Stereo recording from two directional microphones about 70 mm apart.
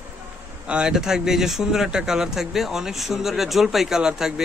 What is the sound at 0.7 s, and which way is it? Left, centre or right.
Speech, centre.